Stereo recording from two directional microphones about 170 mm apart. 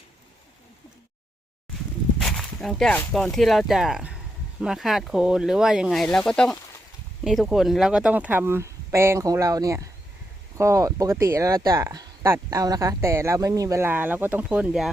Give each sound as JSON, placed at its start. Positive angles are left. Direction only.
{"t": 2.1, "sound": "walk", "side_deg": 5}
{"t": 3.1, "sound": "speech", "side_deg": 0}